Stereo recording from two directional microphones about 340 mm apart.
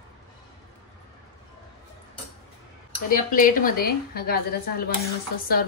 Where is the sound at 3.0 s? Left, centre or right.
Left.